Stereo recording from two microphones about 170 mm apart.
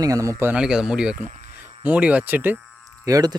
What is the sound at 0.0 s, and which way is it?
A man's voice, 20° right (ahead or behind).